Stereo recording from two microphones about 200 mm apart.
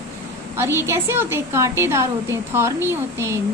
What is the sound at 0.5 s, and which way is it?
A woman's voice, 10° right (ahead or behind).